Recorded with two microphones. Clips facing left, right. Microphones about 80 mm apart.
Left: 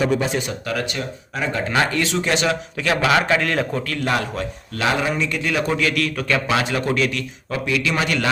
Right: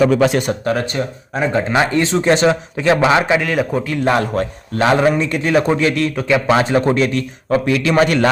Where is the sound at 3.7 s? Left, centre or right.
Centre.